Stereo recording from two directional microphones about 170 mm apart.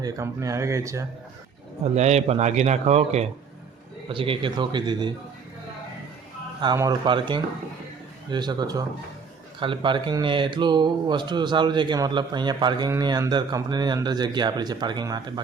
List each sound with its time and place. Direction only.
0.0 s speech: 20° right (ahead or behind)
1.8 s a man's voice: 40° right (ahead or behind)
6.7 s speech: 25° right (ahead or behind)